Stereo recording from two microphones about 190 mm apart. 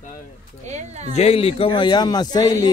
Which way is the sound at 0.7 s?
35° right (ahead or behind).